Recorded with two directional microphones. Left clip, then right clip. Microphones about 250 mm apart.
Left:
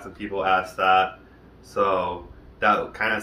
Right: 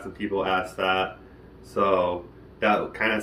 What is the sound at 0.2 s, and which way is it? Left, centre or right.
Speech, centre.